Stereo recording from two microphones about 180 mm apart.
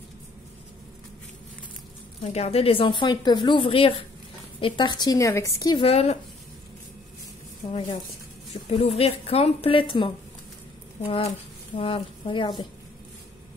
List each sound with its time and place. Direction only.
2.2 s speech: 35° left (ahead or behind)
5.9 s a woman's voice: 35° left (ahead or behind)
8.6 s a woman's voice: 35° left (ahead or behind)